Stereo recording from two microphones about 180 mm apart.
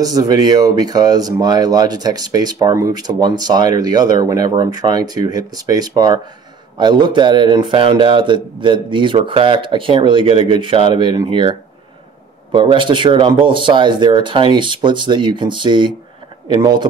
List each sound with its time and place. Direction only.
0.0 s speech: 20° right (ahead or behind)
12.5 s speech: 25° right (ahead or behind)